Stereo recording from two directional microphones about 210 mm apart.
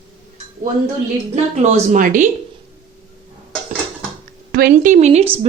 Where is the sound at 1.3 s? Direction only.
30° right (ahead or behind).